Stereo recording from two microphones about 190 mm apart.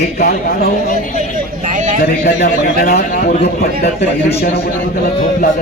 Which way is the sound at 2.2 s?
55° left (ahead or behind).